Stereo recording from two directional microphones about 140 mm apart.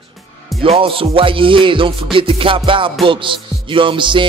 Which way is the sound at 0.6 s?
40° right (ahead or behind).